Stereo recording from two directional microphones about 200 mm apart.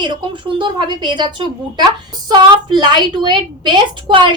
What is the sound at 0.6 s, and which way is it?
A woman's voice, 25° right (ahead or behind).